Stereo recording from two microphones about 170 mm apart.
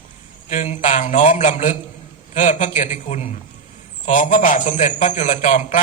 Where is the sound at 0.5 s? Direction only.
45° left (ahead or behind).